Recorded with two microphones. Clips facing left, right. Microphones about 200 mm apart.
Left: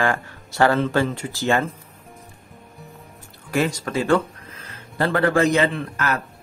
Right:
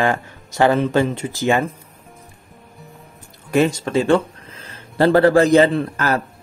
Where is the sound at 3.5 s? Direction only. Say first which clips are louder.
Right 5 dB; 25° right (ahead or behind).